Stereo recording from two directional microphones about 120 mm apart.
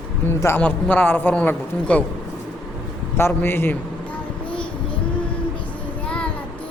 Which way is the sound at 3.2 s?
20° left (ahead or behind).